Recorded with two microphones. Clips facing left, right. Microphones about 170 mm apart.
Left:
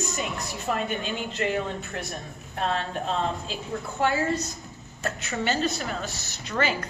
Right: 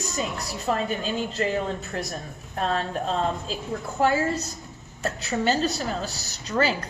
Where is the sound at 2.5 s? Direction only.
40° right (ahead or behind).